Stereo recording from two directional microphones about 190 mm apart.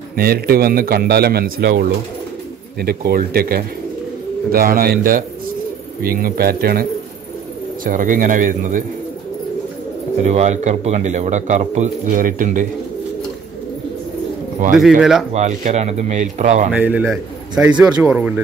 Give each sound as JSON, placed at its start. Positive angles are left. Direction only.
{"t": 0.1, "sound": "a man's voice", "side_deg": -55}
{"t": 10.2, "sound": "speech", "side_deg": -40}
{"t": 14.8, "sound": "speech", "side_deg": -5}
{"t": 15.3, "sound": "speech", "side_deg": -35}
{"t": 16.7, "sound": "a man's voice", "side_deg": -10}
{"t": 17.7, "sound": "speech", "side_deg": -20}
{"t": 18.0, "sound": "a man's voice", "side_deg": -5}